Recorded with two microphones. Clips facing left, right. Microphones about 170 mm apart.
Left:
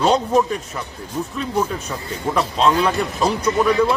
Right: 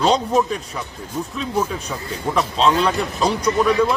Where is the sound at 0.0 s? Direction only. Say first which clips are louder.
Left 1 dB; centre (ahead or behind).